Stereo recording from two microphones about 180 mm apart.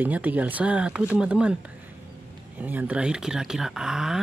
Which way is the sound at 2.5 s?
10° right (ahead or behind).